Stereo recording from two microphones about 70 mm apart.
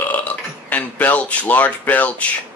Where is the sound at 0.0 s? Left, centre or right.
Left.